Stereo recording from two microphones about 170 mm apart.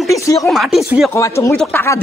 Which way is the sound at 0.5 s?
Centre (ahead or behind).